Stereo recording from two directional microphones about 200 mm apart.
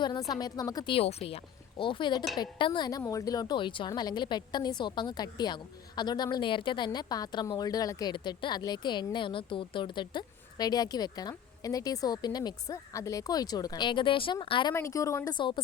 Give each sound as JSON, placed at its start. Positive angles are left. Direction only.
{"t": 0.3, "sound": "a woman's voice", "side_deg": 20}